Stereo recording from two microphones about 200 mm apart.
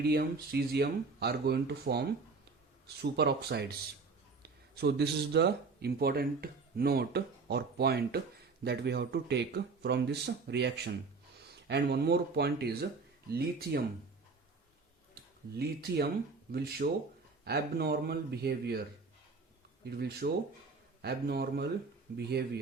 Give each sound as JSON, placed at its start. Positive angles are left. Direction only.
{"t": 0.0, "sound": "speech", "side_deg": -55}
{"t": 15.1, "sound": "speech", "side_deg": -50}
{"t": 19.8, "sound": "speech", "side_deg": -55}